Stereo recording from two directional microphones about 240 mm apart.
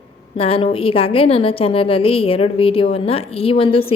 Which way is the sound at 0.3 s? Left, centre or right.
Left.